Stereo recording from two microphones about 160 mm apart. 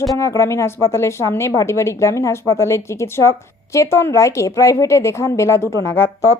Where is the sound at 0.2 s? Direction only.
20° left (ahead or behind).